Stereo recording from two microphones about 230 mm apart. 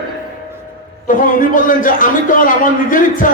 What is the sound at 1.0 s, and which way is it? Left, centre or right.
A man's voice, left.